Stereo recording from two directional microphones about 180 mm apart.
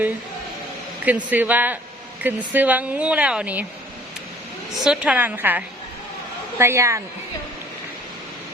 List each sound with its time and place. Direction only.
1.0 s speech: 10° right (ahead or behind)
4.8 s speech: 5° right (ahead or behind)